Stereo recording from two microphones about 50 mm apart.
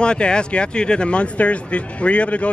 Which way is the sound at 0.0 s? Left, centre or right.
Centre.